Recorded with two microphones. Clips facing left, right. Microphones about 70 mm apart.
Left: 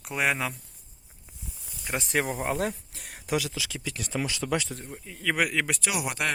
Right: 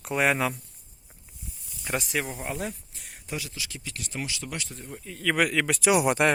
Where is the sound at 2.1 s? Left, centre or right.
Left.